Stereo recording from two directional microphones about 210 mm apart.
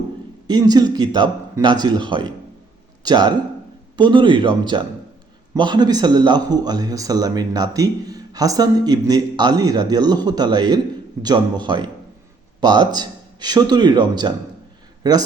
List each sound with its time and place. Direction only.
0.4 s a man's voice: 20° right (ahead or behind)